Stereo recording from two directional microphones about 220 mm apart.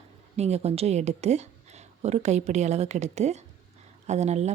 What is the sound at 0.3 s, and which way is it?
A woman's voice, 30° right (ahead or behind).